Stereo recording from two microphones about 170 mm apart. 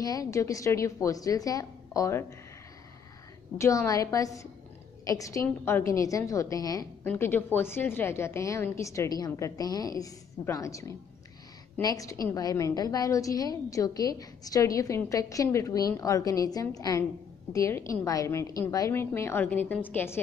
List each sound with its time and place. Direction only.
0.0 s a woman's voice: 20° left (ahead or behind)
3.5 s a woman's voice: 20° left (ahead or behind)